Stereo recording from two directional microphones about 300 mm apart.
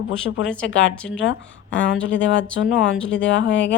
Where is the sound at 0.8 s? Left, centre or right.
Centre.